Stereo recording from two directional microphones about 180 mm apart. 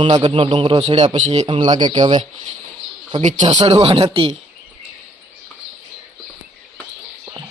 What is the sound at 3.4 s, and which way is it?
Speech, 25° right (ahead or behind).